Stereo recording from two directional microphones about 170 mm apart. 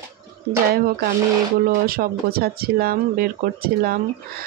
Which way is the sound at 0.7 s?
60° right (ahead or behind).